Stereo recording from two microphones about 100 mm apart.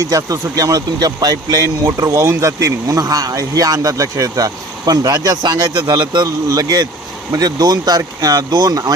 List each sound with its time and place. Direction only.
0.0 s speech: 35° right (ahead or behind)